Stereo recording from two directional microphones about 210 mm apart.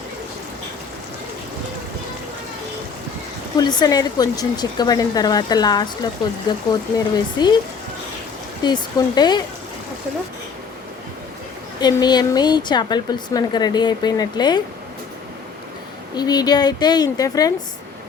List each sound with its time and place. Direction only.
3.6 s speech: 20° left (ahead or behind)
8.6 s speech: 20° left (ahead or behind)
11.8 s speech: 20° left (ahead or behind)
16.1 s speech: 20° left (ahead or behind)